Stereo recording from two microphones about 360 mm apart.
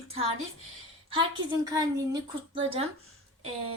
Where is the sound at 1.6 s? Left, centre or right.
Centre.